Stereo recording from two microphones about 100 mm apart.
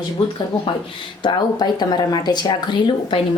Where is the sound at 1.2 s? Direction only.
45° left (ahead or behind).